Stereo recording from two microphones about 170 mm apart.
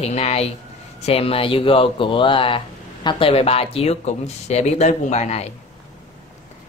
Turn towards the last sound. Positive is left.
turn(degrees=40)  # may be behind; listen again after turning